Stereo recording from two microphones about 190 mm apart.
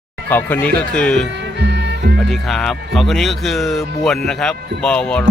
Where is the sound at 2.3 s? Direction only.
Centre (ahead or behind).